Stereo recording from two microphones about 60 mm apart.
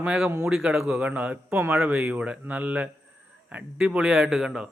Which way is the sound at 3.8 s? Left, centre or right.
Centre.